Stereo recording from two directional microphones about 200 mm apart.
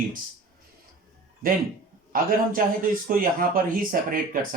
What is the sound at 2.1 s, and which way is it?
Speech, 45° right (ahead or behind).